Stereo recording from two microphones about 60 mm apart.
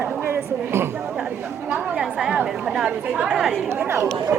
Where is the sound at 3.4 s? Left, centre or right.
Centre.